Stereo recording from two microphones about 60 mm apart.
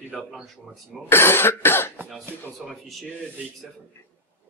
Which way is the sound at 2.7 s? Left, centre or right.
Centre.